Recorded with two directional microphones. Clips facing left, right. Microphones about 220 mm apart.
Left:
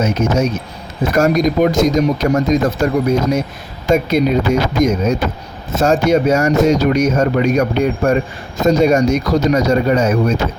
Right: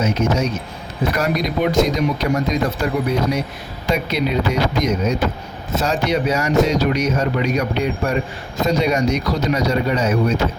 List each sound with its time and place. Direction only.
0.0 s speech: 45° left (ahead or behind)